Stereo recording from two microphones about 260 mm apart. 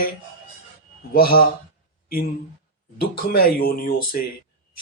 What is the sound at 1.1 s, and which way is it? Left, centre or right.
Speech, left.